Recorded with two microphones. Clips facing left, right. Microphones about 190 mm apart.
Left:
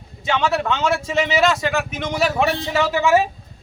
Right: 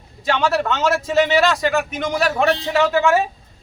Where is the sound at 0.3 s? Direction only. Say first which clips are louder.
Right 1 dB; centre (ahead or behind).